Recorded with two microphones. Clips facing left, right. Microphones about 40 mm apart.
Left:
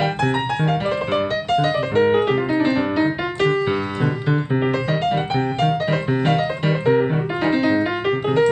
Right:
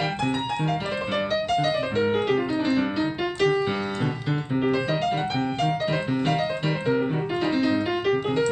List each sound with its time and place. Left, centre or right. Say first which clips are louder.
0.0 s music: left 5 dB; left
1.1 s music: left 2 dB; centre
2.0 s piano: left 8 dB; left
5.1 s music: left 4 dB; left
6.9 s music: left 6 dB; left